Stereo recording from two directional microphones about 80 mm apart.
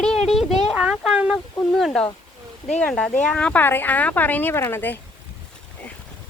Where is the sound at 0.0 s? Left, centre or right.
Centre.